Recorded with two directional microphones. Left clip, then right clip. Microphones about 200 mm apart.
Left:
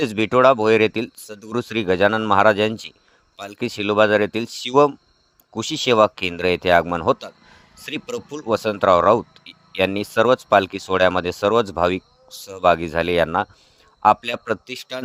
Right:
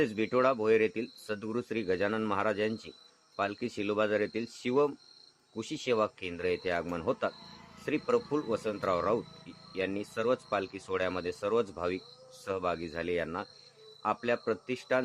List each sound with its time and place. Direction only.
0.0 s speech: 50° left (ahead or behind)
8.4 s speech: 50° left (ahead or behind)